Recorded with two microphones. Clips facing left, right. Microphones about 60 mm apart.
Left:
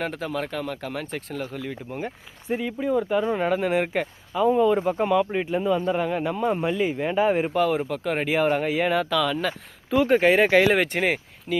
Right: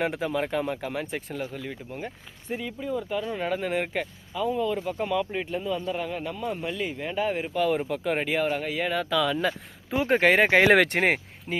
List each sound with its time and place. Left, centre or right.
0.0 s speech: centre
1.9 s speech: centre
3.0 s speech: left
3.5 s speech: centre
4.5 s speech: left
7.5 s speech: centre
7.9 s speech: centre
8.4 s speech: centre
9.0 s speech: centre
10.2 s speech: right
10.7 s speech: right